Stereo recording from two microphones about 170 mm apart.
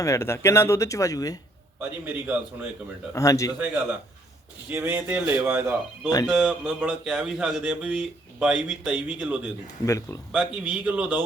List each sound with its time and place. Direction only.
0.0 s speech: 15° left (ahead or behind)
2.2 s speech: 10° right (ahead or behind)
3.2 s a man's voice: 20° left (ahead or behind)
4.7 s speech: 10° right (ahead or behind)
9.8 s a man's voice: 20° left (ahead or behind)
10.3 s speech: 5° right (ahead or behind)